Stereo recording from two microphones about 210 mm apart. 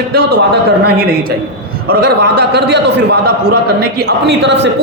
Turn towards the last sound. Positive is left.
turn(degrees=-55)  # may be behind; listen again after turning